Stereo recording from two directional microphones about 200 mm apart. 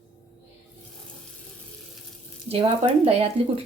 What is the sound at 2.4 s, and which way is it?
Speech, 30° right (ahead or behind).